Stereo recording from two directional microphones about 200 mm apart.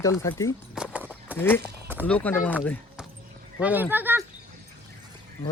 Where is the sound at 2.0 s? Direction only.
5° left (ahead or behind).